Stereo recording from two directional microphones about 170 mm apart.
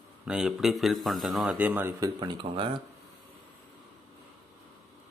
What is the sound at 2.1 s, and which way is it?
Speech, 25° right (ahead or behind).